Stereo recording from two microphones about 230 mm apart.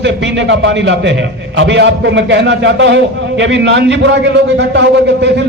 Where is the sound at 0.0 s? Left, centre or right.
Right.